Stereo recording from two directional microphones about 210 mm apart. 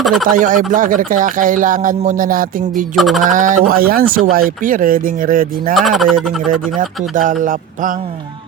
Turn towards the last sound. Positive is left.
turn(degrees=-40)  # may be behind; listen again after turning